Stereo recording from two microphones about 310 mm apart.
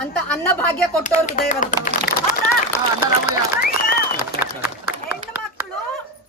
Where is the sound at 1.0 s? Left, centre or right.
Left.